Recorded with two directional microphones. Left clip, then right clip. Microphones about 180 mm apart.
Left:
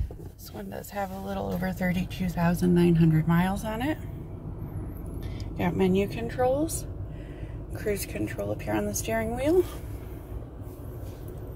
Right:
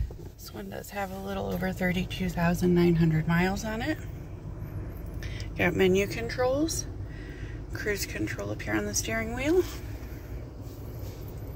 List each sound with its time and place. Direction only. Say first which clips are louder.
0.6 s speech: left 2 dB; 15° left (ahead or behind)
5.6 s speech: right 2 dB; 5° left (ahead or behind)